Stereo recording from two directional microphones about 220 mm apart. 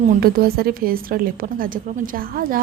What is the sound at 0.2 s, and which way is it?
A woman's voice, 45° right (ahead or behind).